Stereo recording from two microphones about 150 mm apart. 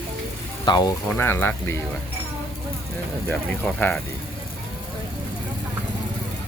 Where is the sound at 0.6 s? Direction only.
30° left (ahead or behind).